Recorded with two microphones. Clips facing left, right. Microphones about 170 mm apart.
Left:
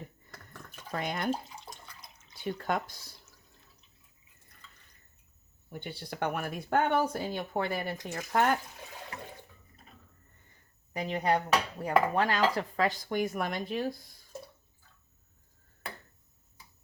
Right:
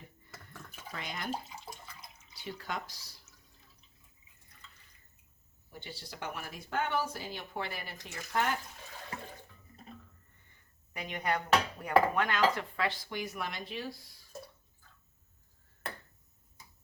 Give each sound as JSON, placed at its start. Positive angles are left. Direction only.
{"t": 0.3, "sound": "a sound", "side_deg": -5}
{"t": 0.9, "sound": "speech", "side_deg": 50}
{"t": 1.5, "sound": "water", "side_deg": -5}
{"t": 2.3, "sound": "speech", "side_deg": 50}
{"t": 5.7, "sound": "speech", "side_deg": 55}
{"t": 10.9, "sound": "dishes", "side_deg": 35}
{"t": 12.5, "sound": "speech", "side_deg": 40}